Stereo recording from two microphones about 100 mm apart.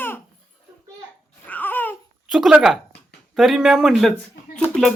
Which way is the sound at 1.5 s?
20° left (ahead or behind).